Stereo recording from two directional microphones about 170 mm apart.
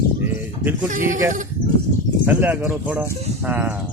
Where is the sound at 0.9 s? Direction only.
50° right (ahead or behind).